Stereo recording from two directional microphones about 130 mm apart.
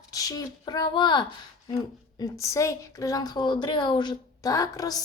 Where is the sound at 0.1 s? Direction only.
25° left (ahead or behind).